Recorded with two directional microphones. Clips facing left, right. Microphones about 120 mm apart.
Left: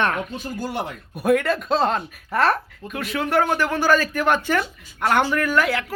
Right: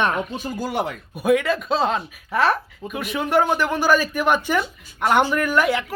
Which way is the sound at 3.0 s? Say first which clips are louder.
Right 1 dB; 15° right (ahead or behind).